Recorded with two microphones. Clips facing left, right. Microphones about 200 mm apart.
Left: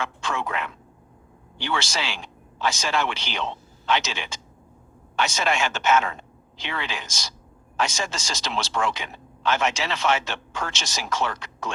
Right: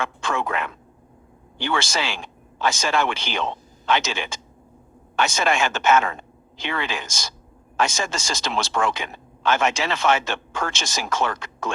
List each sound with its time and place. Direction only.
0.0 s speech: 50° right (ahead or behind)